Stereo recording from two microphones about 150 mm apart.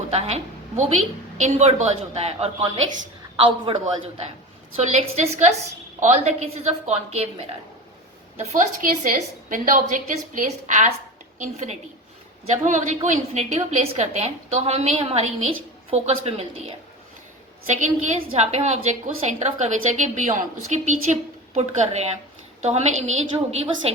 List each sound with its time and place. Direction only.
0.1 s a woman's voice: 45° right (ahead or behind)
4.8 s a woman's voice: 50° right (ahead or behind)